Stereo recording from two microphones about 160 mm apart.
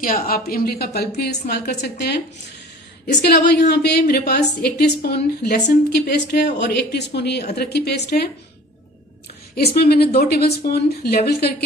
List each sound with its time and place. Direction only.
0.0 s a woman's voice: 60° left (ahead or behind); by 8.2 s 90° left
9.6 s a woman's voice: 75° left (ahead or behind)